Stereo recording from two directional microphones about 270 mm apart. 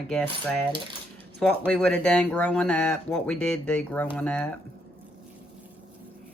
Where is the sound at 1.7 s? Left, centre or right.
Centre.